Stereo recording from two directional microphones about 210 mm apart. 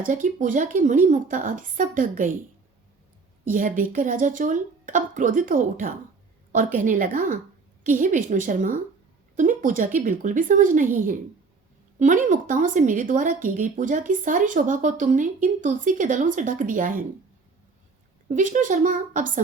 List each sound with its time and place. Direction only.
0.0 s speech: 40° right (ahead or behind)
3.4 s speech: 40° right (ahead or behind)
18.3 s speech: 35° right (ahead or behind)